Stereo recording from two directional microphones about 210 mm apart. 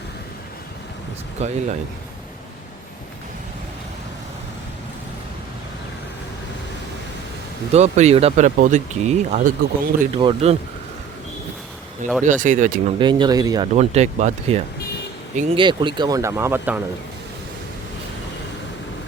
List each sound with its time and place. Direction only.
1.4 s speech: 30° right (ahead or behind)
7.7 s speech: 30° right (ahead or behind)
10.2 s speech: 25° right (ahead or behind)
12.2 s speech: 35° right (ahead or behind)
13.0 s speech: 20° right (ahead or behind)
13.7 s speech: 30° right (ahead or behind); by 16.8 s 10° right (ahead or behind)